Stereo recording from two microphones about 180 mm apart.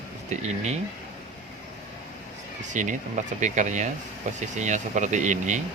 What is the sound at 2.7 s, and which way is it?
Speech, 45° right (ahead or behind).